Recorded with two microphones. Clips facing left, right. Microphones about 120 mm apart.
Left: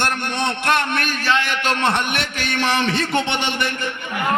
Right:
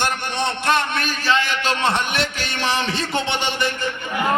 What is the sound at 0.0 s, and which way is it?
A man's voice, 60° left (ahead or behind).